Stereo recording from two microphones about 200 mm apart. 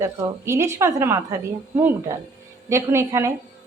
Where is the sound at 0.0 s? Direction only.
15° right (ahead or behind).